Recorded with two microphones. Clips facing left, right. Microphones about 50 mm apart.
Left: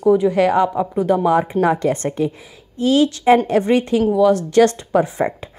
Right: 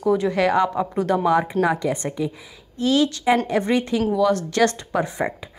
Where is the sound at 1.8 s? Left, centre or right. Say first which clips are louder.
Left 5 dB; left.